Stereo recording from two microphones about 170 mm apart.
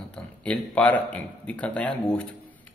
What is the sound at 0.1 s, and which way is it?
A man's voice, 5° left (ahead or behind).